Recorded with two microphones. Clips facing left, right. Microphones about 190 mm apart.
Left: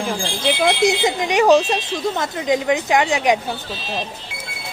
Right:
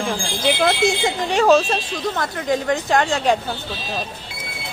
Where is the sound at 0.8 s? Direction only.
20° left (ahead or behind).